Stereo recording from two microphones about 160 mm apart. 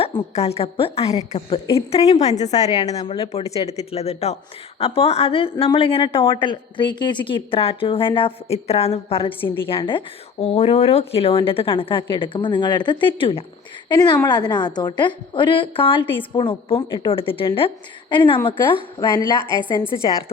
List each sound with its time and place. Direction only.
0.0 s a woman's voice: 40° left (ahead or behind)
19.5 s a woman's voice: 30° right (ahead or behind)
19.9 s speech: 25° left (ahead or behind)